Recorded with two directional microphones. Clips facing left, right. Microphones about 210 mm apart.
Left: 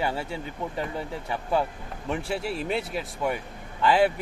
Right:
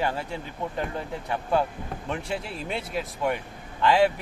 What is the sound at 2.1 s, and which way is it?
Speech, 5° left (ahead or behind).